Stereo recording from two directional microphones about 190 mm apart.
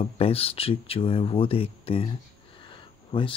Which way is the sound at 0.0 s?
30° left (ahead or behind).